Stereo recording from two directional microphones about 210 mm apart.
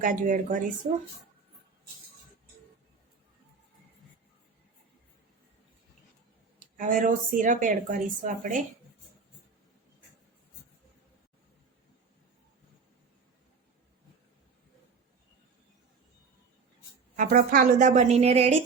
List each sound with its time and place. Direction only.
0.0 s a woman's voice: 40° right (ahead or behind)
6.7 s a woman's voice: 40° right (ahead or behind)
17.2 s a woman's voice: 40° right (ahead or behind)